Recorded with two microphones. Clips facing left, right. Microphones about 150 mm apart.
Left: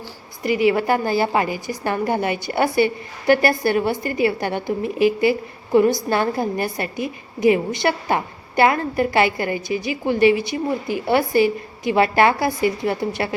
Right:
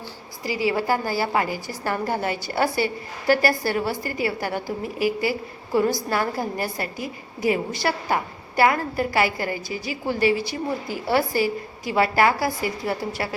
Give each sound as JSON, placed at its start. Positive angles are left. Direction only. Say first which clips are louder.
{"t": 0.6, "sound": "a woman's voice", "louder": "left 4 dB", "side_deg": 20}